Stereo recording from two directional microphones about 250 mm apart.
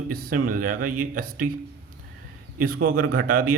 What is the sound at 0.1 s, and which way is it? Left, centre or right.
Speech, right.